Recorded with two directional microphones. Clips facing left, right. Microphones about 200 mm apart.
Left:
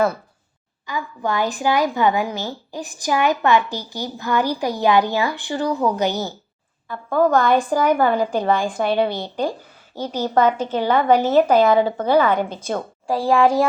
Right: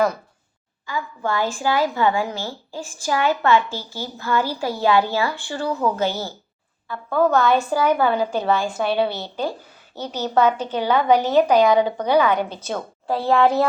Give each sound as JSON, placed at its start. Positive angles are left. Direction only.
{"t": 0.9, "sound": "speech", "side_deg": 15}
{"t": 11.6, "sound": "a woman's voice", "side_deg": -15}
{"t": 12.5, "sound": "speech", "side_deg": 10}